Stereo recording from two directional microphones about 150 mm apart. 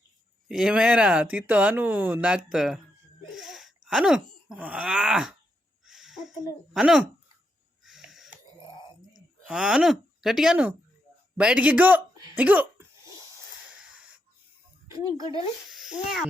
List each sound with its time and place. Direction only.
0.4 s speech: 5° right (ahead or behind)
7.9 s wheeze: centre (ahead or behind)
9.1 s speech: 5° right (ahead or behind)
12.1 s hiccup: 25° right (ahead or behind)
12.4 s speech: 10° right (ahead or behind)
14.9 s speech: 25° right (ahead or behind)
15.7 s a sound: centre (ahead or behind)